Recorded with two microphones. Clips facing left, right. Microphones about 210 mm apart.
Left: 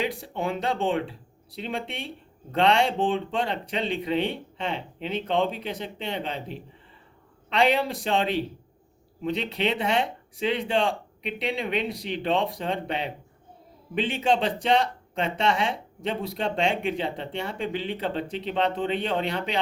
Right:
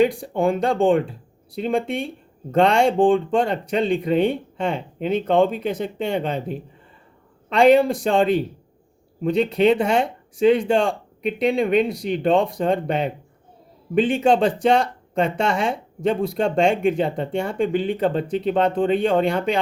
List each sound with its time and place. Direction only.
0.0 s speech: 50° right (ahead or behind)